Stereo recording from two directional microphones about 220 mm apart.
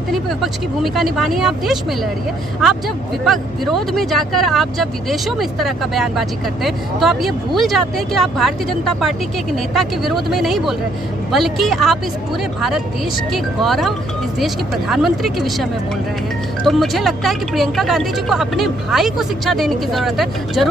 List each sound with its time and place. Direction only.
0.1 s speech: centre (ahead or behind)
3.3 s speech: centre (ahead or behind)
13.3 s speech: centre (ahead or behind)